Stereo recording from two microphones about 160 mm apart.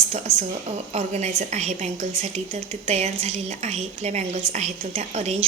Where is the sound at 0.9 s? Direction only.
45° right (ahead or behind).